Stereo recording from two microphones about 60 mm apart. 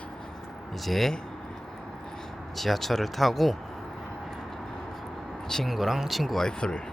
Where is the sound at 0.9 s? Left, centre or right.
Centre.